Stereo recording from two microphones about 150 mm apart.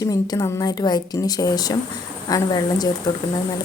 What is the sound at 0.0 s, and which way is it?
A woman's voice, 25° left (ahead or behind).